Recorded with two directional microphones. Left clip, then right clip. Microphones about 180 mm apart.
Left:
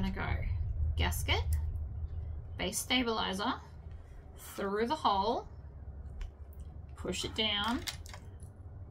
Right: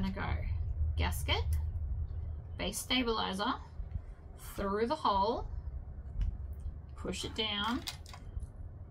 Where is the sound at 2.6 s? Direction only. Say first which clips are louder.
Left 1 dB; 20° left (ahead or behind).